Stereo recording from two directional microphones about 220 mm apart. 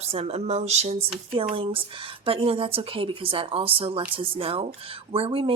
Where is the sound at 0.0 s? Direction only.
25° right (ahead or behind).